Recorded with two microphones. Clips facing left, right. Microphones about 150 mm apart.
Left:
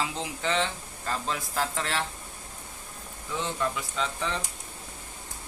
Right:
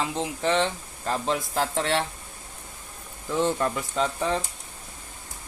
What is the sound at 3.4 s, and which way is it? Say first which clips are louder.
Speech: right 6 dB; 45° right (ahead or behind).